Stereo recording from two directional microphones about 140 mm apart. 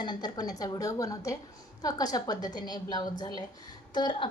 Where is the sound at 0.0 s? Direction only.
30° left (ahead or behind).